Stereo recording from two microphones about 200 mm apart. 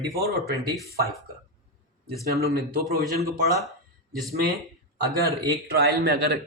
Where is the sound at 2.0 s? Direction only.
50° right (ahead or behind).